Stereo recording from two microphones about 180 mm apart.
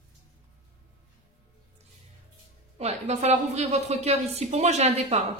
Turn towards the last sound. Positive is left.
turn(degrees=-35)  # may be behind; listen again after turning